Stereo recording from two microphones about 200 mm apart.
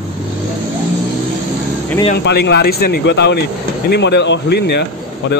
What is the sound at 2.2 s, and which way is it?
Speech, 55° left (ahead or behind).